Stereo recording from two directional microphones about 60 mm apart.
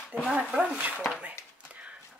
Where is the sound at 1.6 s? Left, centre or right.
Right.